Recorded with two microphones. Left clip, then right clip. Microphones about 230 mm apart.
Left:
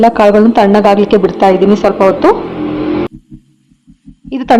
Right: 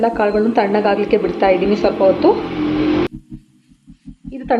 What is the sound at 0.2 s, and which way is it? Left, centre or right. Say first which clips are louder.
A woman's voice: left 8 dB; left.